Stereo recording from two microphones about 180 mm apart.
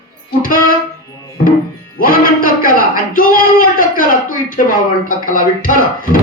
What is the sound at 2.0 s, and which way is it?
A man's voice, 50° left (ahead or behind).